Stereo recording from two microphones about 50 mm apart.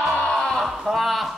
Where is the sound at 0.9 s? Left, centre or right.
Centre.